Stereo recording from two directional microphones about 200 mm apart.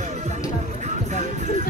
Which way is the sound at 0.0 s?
35° right (ahead or behind).